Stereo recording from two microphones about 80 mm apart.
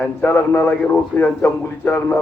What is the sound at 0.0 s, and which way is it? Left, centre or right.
A man's voice, left.